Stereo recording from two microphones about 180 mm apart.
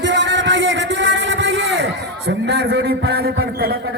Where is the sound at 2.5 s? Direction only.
70° right (ahead or behind).